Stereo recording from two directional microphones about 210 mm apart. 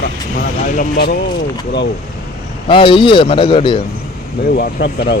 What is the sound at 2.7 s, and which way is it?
A man's voice, 25° left (ahead or behind).